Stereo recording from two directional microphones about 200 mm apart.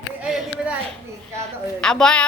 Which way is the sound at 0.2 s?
5° right (ahead or behind).